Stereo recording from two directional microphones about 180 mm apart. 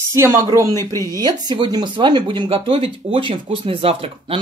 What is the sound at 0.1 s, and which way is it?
Speech, 15° right (ahead or behind).